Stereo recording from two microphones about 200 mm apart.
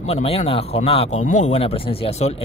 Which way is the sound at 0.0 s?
30° left (ahead or behind).